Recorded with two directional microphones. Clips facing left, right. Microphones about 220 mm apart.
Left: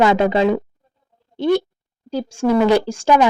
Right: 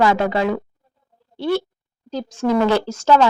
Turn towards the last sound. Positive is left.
turn(degrees=15)  # may be behind; listen again after turning